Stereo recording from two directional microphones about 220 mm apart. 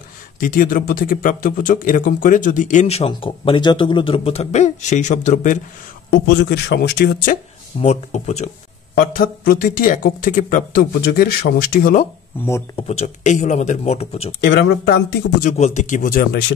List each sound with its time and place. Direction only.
0.4 s speech: 40° left (ahead or behind)
6.0 s speech: 50° left (ahead or behind)
7.8 s speech: 30° left (ahead or behind)
9.0 s speech: 40° left (ahead or behind)
12.4 s speech: 15° left (ahead or behind)
12.8 s speech: 30° left (ahead or behind)
14.4 s speech: 50° left (ahead or behind)
15.5 s speech: 30° left (ahead or behind)